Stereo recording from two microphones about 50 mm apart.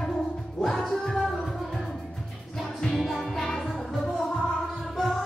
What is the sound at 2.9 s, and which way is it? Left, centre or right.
Music, centre.